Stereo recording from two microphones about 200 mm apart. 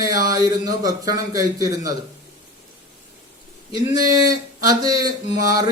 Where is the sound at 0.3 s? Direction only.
20° right (ahead or behind).